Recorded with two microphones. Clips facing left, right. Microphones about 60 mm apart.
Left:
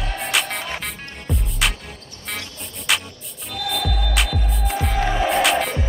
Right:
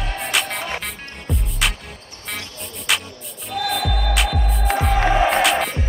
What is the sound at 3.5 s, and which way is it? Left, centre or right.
Music, centre.